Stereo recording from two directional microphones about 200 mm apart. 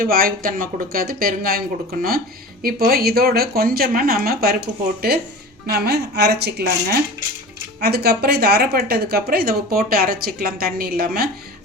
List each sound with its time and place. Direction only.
0.0 s speech: 45° right (ahead or behind)
5.6 s speech: 50° right (ahead or behind)